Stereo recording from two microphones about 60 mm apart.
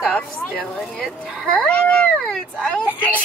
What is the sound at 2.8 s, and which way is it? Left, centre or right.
Speech, right.